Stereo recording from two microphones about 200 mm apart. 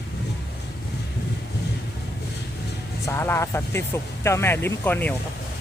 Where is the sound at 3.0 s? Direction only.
15° left (ahead or behind).